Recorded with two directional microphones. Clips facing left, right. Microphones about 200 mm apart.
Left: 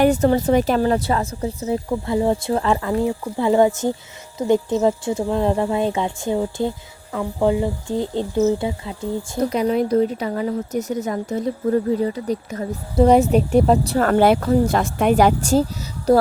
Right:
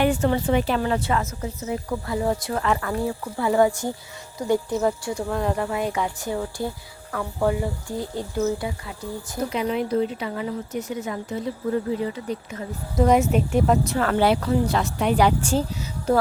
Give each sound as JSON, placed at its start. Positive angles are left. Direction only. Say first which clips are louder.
{"t": 0.0, "sound": "speech", "louder": "left 5 dB", "side_deg": 40}
{"t": 9.4, "sound": "speech", "louder": "left 5 dB", "side_deg": 40}